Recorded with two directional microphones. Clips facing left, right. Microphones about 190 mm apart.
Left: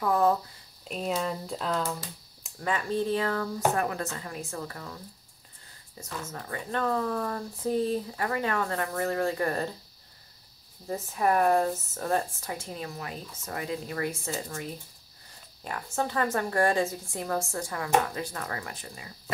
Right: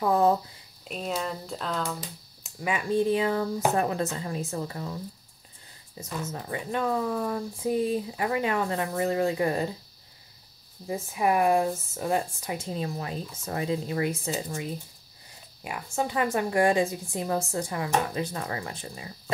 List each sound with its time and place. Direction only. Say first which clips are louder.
0.0 s a woman's voice: right 2 dB; 25° right (ahead or behind)
0.8 s speech: left 1 dB; centre (ahead or behind)
2.4 s a woman's voice: right 1 dB; 10° right (ahead or behind)
6.2 s speech: right 4 dB; 20° right (ahead or behind)
10.9 s a woman's voice: right 1 dB; 10° right (ahead or behind); by 19.3 s 25° right (ahead or behind)